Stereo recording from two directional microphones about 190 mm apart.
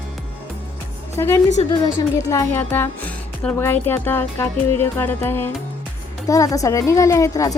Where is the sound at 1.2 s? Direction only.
15° left (ahead or behind).